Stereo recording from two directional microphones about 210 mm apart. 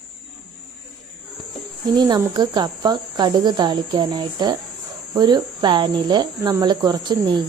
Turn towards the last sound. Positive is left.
turn(degrees=-20)  # may be behind; listen again after turning